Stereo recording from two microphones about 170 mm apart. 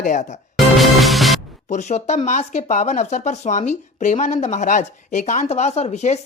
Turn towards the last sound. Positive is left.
turn(degrees=40)  # may be behind; listen again after turning